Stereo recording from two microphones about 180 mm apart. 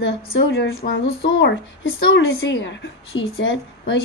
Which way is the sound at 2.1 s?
90° left.